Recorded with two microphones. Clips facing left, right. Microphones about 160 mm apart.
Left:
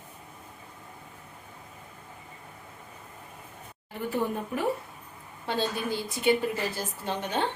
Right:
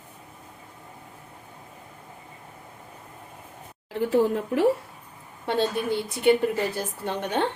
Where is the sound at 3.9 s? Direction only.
90° right.